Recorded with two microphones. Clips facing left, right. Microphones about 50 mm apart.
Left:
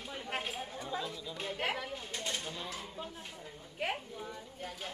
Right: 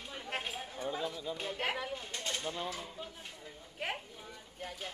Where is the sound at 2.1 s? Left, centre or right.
Centre.